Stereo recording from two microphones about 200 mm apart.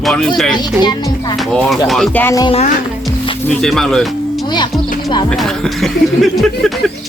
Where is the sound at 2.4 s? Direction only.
30° left (ahead or behind).